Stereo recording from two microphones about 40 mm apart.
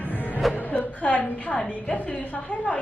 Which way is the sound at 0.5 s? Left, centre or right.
Left.